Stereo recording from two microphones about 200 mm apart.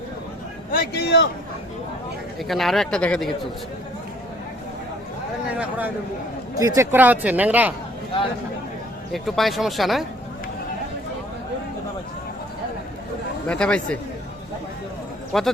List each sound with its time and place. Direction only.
0.7 s speech: 50° left (ahead or behind)
2.5 s speech: centre (ahead or behind)
6.6 s speech: 15° right (ahead or behind)
9.1 s speech: centre (ahead or behind)
13.5 s speech: 5° left (ahead or behind)
15.3 s a man's voice: centre (ahead or behind)